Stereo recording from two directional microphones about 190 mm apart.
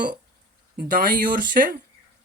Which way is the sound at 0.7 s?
50° right (ahead or behind).